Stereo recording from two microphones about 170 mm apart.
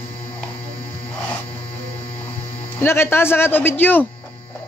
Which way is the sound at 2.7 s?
15° left (ahead or behind).